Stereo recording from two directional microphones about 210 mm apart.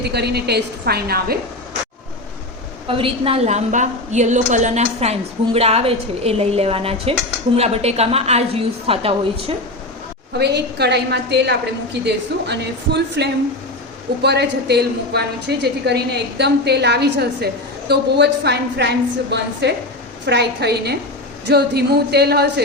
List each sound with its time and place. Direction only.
0.0 s a woman's voice: 50° right (ahead or behind)
2.8 s a woman's voice: 25° right (ahead or behind)
10.3 s a woman's voice: 50° right (ahead or behind)